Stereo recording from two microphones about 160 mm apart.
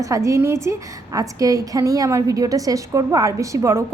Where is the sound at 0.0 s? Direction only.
20° right (ahead or behind).